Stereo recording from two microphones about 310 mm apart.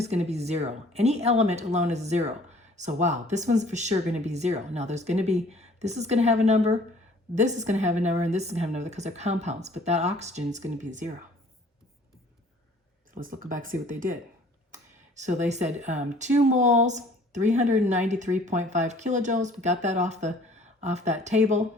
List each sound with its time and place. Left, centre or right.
0.0 s speech: right
13.1 s speech: right